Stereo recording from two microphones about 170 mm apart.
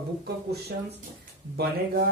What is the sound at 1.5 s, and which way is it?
Speech, 70° right (ahead or behind).